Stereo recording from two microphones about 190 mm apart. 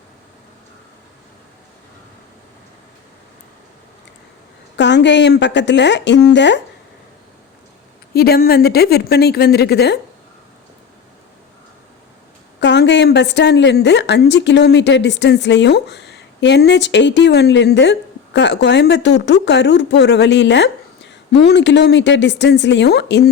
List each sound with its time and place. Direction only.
4.8 s speech: 65° left (ahead or behind)
8.1 s a woman's voice: 55° left (ahead or behind)
12.5 s a woman's voice: 65° left (ahead or behind)